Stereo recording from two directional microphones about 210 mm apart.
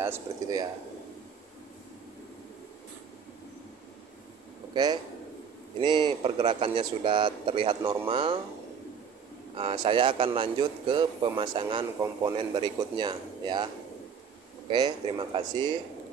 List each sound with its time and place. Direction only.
0.0 s speech: 15° right (ahead or behind)
5.8 s a man's voice: 20° right (ahead or behind)
7.8 s speech: 15° right (ahead or behind)
8.1 s a man's voice: 25° right (ahead or behind)
9.6 s a man's voice: 25° right (ahead or behind)
14.7 s a man's voice: 20° right (ahead or behind)